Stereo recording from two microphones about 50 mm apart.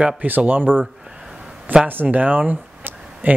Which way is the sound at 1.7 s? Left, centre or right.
Right.